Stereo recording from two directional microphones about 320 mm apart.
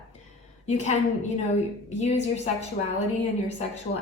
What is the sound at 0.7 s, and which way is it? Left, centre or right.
Speech, left.